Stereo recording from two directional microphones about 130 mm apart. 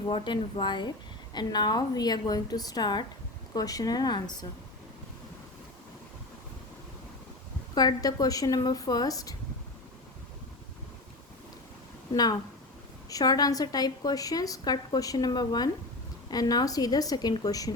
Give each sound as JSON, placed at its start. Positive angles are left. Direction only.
{"t": 0.1, "sound": "a woman's voice", "side_deg": 40}
{"t": 7.8, "sound": "a woman's voice", "side_deg": 30}
{"t": 12.1, "sound": "a woman's voice", "side_deg": 30}